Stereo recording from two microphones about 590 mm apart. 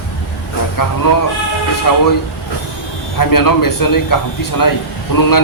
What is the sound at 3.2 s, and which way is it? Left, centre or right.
A man's voice, left.